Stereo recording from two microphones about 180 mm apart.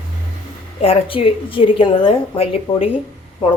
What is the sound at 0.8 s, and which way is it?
A woman's voice, 30° left (ahead or behind).